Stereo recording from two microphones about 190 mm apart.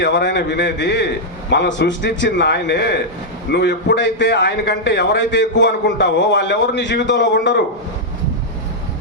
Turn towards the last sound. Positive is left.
turn(degrees=65)  # may be behind; listen again after turning